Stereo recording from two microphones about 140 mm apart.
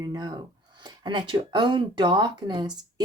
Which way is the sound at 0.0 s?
30° right (ahead or behind).